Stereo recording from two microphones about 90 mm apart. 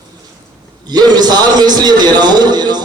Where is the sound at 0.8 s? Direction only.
50° right (ahead or behind).